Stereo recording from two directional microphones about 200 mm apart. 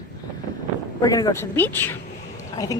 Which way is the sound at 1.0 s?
20° left (ahead or behind).